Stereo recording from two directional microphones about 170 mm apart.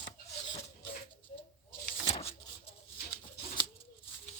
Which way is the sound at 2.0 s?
35° left (ahead or behind).